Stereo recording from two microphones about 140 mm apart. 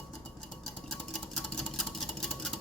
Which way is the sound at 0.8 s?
Centre (ahead or behind).